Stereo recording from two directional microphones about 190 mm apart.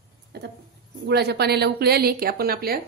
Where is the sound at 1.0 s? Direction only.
60° right (ahead or behind).